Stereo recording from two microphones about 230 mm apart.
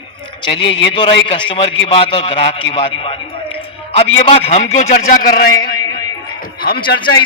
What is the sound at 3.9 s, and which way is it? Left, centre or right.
A man's voice, left.